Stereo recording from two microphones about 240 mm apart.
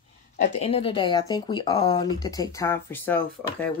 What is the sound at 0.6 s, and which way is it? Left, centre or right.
Speech, left.